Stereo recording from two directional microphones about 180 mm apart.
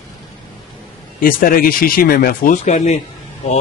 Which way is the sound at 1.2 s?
50° left (ahead or behind).